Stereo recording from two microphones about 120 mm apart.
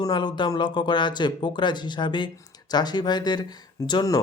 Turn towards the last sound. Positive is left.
turn(degrees=35)  # may be behind; listen again after turning